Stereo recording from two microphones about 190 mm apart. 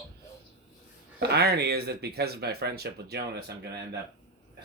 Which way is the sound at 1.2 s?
60° right (ahead or behind).